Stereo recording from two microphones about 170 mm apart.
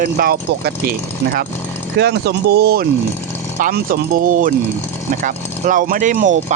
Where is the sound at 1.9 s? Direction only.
75° right (ahead or behind).